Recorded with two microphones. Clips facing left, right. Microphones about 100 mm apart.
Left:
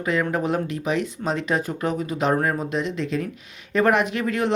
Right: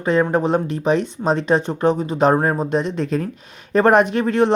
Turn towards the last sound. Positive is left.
turn(degrees=-30)  # may be behind; listen again after turning